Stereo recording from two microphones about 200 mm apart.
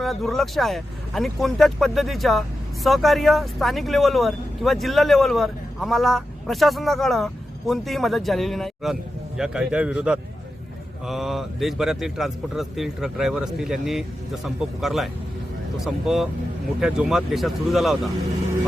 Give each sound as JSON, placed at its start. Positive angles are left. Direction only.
{"t": 0.0, "sound": "speech", "side_deg": 0}